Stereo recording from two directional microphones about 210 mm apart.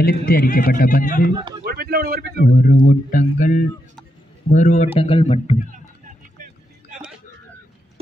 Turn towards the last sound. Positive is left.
turn(degrees=-5)  # may be behind; listen again after turning